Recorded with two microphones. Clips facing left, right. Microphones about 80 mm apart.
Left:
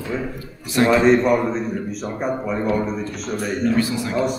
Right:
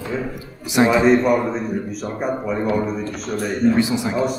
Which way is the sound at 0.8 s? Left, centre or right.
Centre.